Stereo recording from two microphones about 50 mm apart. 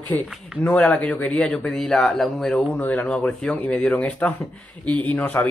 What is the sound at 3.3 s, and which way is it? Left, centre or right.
Speech, centre.